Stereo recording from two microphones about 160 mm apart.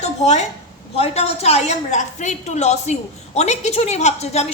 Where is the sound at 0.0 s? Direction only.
45° left (ahead or behind).